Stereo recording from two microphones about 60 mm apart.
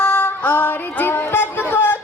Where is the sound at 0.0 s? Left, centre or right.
Left.